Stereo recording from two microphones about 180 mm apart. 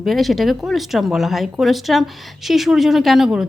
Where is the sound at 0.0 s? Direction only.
Centre (ahead or behind).